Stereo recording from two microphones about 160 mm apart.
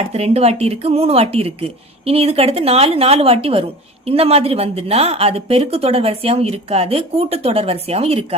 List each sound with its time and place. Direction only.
0.1 s a woman's voice: 40° right (ahead or behind)